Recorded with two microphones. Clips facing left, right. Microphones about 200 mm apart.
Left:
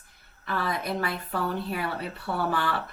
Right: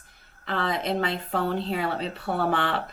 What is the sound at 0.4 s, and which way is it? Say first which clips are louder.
A woman's voice: right 3 dB; 25° right (ahead or behind).